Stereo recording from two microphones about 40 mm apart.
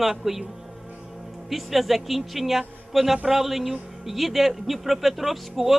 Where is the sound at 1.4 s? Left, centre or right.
Centre.